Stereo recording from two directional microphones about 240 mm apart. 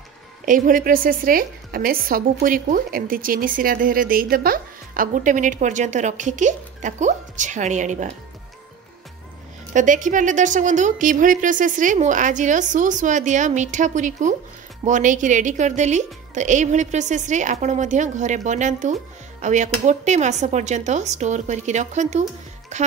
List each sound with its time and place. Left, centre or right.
0.5 s a woman's voice: right
9.8 s a woman's voice: right